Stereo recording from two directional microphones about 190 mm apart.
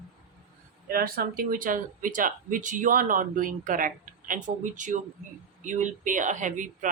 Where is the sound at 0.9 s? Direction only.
50° right (ahead or behind).